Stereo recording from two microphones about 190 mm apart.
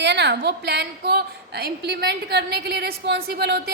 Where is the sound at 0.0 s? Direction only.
65° right (ahead or behind).